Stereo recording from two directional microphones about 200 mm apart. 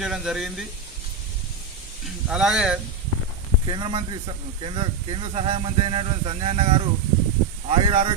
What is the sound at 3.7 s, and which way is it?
Speech, 25° right (ahead or behind).